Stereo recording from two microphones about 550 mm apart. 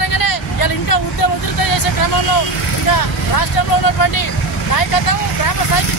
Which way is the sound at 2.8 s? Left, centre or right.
Left.